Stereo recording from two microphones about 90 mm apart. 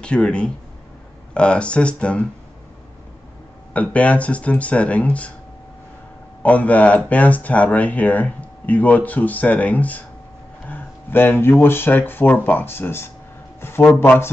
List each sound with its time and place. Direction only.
0.0 s speech: 10° left (ahead or behind)
3.7 s speech: 15° left (ahead or behind)
6.4 s a man's voice: 20° left (ahead or behind)